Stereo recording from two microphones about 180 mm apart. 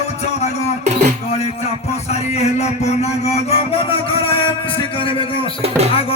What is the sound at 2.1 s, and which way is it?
Music, 35° left (ahead or behind).